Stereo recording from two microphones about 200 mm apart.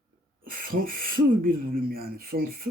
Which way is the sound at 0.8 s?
45° right (ahead or behind).